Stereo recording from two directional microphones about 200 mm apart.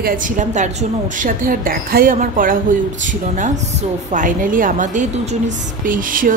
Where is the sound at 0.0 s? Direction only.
45° right (ahead or behind).